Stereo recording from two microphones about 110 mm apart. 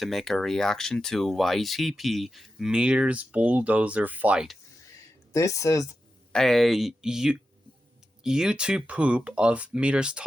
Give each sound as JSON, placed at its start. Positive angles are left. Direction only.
{"t": 0.0, "sound": "speech", "side_deg": 0}
{"t": 5.3, "sound": "speech", "side_deg": 30}
{"t": 6.3, "sound": "speech", "side_deg": 5}